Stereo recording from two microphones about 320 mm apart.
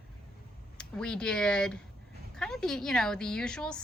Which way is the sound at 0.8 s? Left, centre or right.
Centre.